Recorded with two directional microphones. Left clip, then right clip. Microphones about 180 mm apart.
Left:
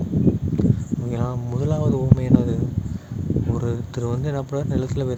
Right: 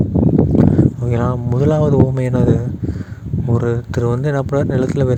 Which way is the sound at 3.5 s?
40° right (ahead or behind).